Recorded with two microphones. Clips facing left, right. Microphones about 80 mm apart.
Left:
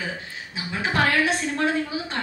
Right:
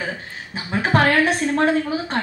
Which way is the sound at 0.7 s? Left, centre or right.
Right.